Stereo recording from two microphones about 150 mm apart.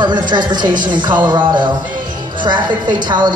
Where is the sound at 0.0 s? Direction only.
30° right (ahead or behind).